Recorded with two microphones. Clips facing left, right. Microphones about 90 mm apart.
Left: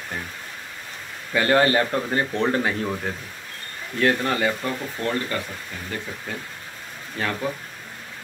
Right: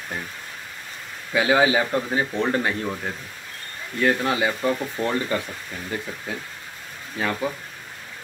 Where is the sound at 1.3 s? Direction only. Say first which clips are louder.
Even; 5° right (ahead or behind).